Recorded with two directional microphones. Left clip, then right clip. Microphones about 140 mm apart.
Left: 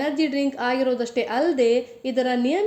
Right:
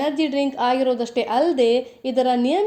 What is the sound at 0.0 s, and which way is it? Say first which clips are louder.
A woman's voice: right 2 dB; 30° right (ahead or behind).